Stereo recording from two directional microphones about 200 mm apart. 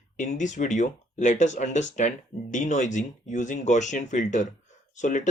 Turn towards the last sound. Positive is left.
turn(degrees=40)  # may be behind; listen again after turning